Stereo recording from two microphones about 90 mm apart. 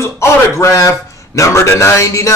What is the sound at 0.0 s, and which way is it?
A man's voice, 30° left (ahead or behind).